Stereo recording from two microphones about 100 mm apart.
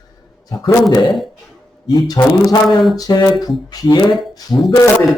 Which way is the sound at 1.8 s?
40° left (ahead or behind).